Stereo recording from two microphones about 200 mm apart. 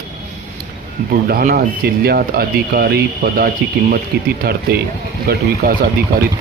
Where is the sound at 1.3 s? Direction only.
50° right (ahead or behind).